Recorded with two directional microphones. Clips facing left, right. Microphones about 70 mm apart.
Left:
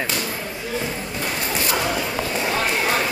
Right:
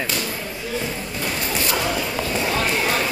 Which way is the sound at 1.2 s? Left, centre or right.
Centre.